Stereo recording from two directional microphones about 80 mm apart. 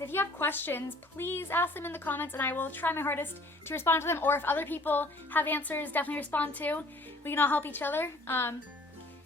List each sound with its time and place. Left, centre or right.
0.0 s a woman's voice: left